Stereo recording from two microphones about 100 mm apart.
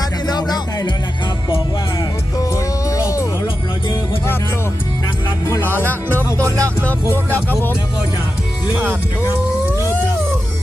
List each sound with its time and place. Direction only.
0.3 s music: 45° left (ahead or behind)
2.4 s music: 35° left (ahead or behind)
5.5 s music: 25° left (ahead or behind)
6.3 s speech: 30° right (ahead or behind)
9.6 s a sound: 25° right (ahead or behind)